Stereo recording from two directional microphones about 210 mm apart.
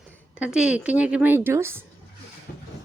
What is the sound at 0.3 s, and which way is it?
A woman's voice, 5° right (ahead or behind).